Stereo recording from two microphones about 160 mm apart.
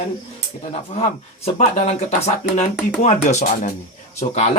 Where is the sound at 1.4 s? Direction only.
40° left (ahead or behind).